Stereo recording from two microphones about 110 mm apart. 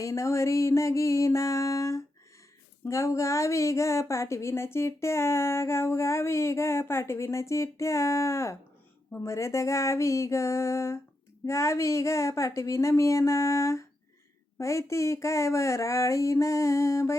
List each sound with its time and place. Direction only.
0.0 s a woman's voice: 30° left (ahead or behind)